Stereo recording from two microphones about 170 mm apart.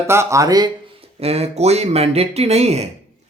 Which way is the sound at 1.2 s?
35° right (ahead or behind).